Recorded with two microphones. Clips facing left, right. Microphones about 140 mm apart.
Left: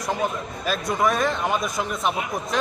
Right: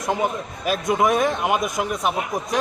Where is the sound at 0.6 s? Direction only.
15° right (ahead or behind).